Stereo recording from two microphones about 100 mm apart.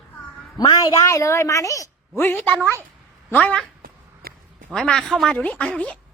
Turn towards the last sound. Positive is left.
turn(degrees=10)  # may be behind; listen again after turning